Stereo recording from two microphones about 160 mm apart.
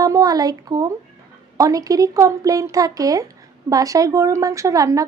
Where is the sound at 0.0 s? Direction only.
20° right (ahead or behind).